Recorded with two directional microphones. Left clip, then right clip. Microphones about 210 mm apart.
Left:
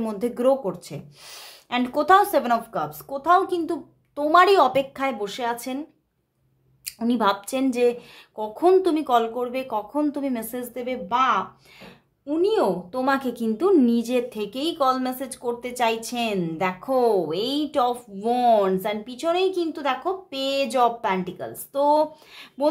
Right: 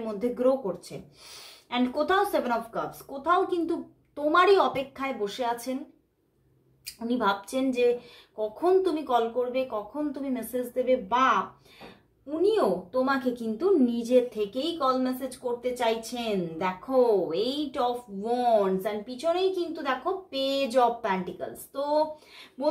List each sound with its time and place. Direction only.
0.0 s speech: 40° left (ahead or behind)
7.0 s a woman's voice: 40° left (ahead or behind)